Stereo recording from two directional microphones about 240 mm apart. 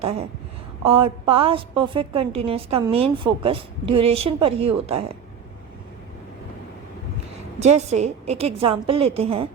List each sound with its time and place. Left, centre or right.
0.0 s a woman's voice: right
7.6 s a woman's voice: right